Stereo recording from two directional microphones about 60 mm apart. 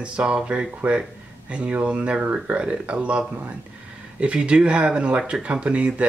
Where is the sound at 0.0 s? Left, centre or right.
Centre.